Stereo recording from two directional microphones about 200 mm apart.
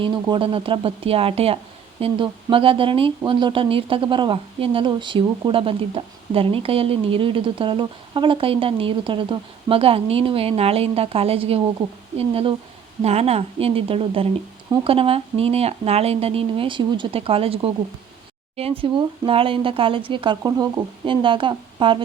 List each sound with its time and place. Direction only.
0.0 s speech: 25° right (ahead or behind)